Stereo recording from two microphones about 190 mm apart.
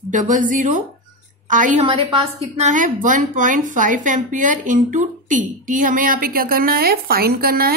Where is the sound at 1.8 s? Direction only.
30° right (ahead or behind).